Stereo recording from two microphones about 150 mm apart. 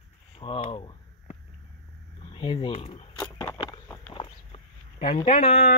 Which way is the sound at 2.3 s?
35° left (ahead or behind).